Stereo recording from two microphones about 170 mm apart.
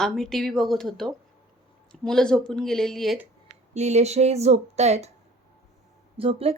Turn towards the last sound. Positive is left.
turn(degrees=-35)  # may be behind; listen again after turning